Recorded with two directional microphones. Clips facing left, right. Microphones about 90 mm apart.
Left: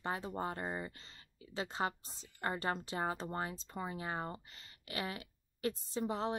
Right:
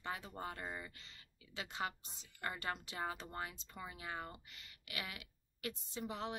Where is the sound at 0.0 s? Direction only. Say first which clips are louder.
Left 6 dB; 35° left (ahead or behind).